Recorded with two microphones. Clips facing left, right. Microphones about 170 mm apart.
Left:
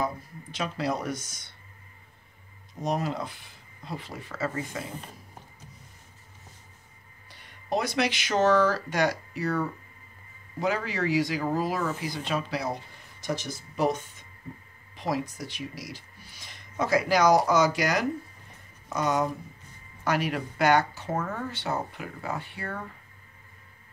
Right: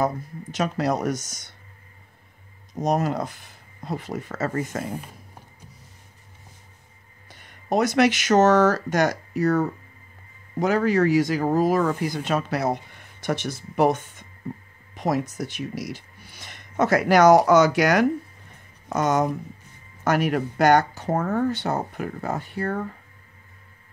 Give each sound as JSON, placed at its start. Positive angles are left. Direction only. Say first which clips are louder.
{"t": 0.0, "sound": "speech", "louder": "right 6 dB", "side_deg": -45}
{"t": 2.7, "sound": "speech", "louder": "right 6 dB", "side_deg": -40}
{"t": 7.2, "sound": "speech", "louder": "right 4 dB", "side_deg": -45}
{"t": 13.2, "sound": "speech", "louder": "right 5 dB", "side_deg": -65}
{"t": 15.9, "sound": "speech", "louder": "right 7 dB", "side_deg": -65}
{"t": 18.9, "sound": "speech", "louder": "right 5 dB", "side_deg": -45}